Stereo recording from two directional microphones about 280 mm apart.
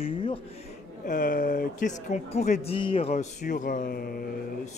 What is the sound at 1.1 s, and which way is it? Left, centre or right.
Speech, left.